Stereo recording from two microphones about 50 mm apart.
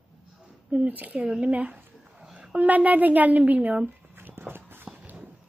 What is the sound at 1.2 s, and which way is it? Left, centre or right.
Speech, centre.